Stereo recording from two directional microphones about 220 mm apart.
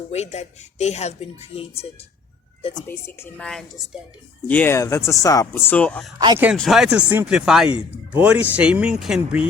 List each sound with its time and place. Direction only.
0.1 s a woman's voice: 30° left (ahead or behind)
2.9 s speech: 10° left (ahead or behind)
6.1 s speech: 15° right (ahead or behind)